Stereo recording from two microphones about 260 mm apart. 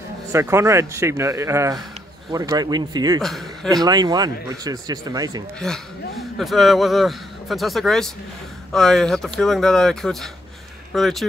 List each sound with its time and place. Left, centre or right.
0.3 s speech: centre
3.2 s a man's voice: centre
3.7 s speech: centre
5.6 s a man's voice: centre